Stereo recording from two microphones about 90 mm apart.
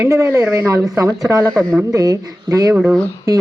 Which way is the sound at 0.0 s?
30° right (ahead or behind).